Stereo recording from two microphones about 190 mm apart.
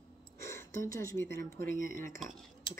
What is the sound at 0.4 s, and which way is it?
Speech, 15° left (ahead or behind).